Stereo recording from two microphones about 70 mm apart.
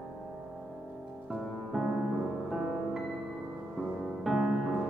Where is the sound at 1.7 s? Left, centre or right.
Centre.